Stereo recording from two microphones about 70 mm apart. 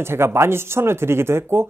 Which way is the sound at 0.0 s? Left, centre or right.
Right.